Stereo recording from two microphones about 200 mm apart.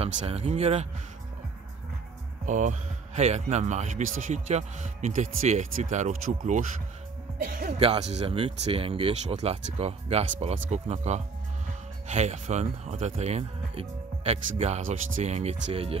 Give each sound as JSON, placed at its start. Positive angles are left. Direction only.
{"t": 0.0, "sound": "speech", "side_deg": -30}
{"t": 2.4, "sound": "speech", "side_deg": -40}
{"t": 7.8, "sound": "speech", "side_deg": -30}